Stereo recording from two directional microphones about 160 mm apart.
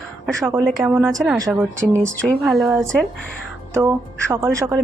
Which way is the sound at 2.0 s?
Centre (ahead or behind).